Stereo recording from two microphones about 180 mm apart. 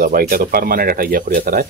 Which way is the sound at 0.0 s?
50° right (ahead or behind).